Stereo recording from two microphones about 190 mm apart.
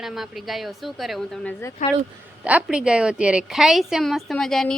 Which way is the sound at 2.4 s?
5° right (ahead or behind).